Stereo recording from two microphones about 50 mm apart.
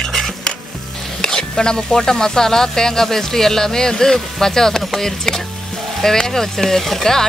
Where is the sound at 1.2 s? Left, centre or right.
Centre.